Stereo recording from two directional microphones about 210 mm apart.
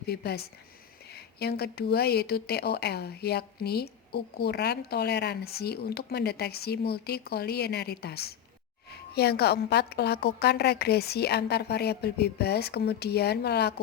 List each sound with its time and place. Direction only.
0.1 s speech: 50° left (ahead or behind)